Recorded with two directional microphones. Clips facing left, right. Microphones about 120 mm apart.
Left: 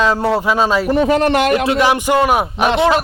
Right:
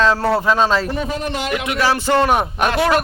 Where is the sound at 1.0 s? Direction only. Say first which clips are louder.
Left 10 dB; 80° left.